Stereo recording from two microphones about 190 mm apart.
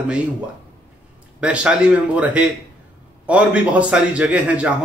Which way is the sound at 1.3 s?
5° right (ahead or behind).